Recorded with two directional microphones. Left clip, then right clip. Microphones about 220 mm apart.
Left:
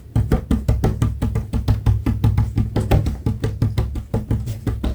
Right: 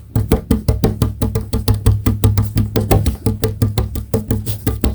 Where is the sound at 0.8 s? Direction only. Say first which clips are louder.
Right 5 dB; 45° right (ahead or behind).